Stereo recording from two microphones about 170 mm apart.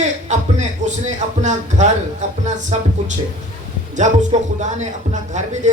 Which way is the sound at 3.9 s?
45° right (ahead or behind).